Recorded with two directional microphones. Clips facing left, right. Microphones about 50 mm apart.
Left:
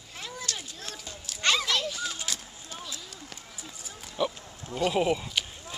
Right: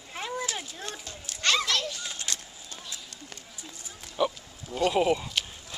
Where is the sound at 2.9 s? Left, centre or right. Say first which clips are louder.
Left 1 dB; centre.